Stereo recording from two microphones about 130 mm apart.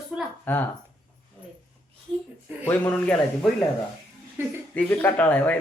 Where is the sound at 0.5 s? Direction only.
10° left (ahead or behind).